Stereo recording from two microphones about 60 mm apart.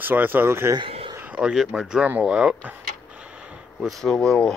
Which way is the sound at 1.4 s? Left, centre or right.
Centre.